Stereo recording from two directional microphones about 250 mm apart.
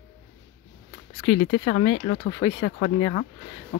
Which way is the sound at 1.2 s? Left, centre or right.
Left.